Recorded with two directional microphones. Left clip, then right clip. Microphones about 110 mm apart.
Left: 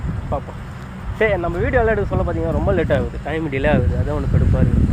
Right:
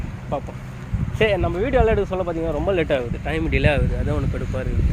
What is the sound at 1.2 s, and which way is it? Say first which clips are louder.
Speech: left 1 dB; 20° right (ahead or behind).